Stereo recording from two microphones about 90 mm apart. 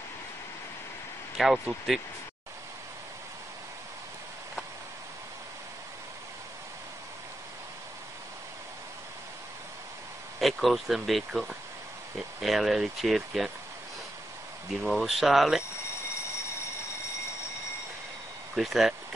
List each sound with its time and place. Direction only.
1.4 s speech: centre (ahead or behind)
10.4 s speech: centre (ahead or behind)
14.8 s speech: centre (ahead or behind)
18.5 s speech: 5° right (ahead or behind)